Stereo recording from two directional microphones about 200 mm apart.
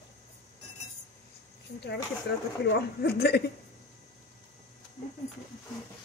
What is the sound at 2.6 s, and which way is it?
Speech, 55° left (ahead or behind).